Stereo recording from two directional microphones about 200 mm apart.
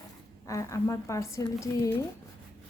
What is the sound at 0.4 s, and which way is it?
A woman's voice, 15° left (ahead or behind).